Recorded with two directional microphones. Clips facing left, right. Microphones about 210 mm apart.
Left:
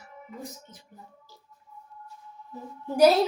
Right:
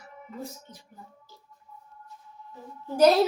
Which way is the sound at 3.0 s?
5° left (ahead or behind).